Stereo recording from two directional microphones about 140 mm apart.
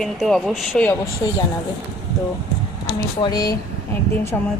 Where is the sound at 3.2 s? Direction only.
30° left (ahead or behind).